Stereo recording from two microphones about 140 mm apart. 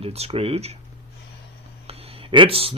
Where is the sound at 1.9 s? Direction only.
45° right (ahead or behind).